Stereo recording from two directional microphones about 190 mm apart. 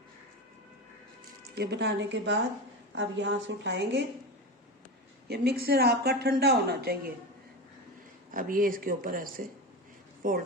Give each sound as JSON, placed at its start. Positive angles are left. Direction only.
{"t": 1.5, "sound": "a woman's voice", "side_deg": -60}
{"t": 5.3, "sound": "speech", "side_deg": -55}
{"t": 8.3, "sound": "speech", "side_deg": -45}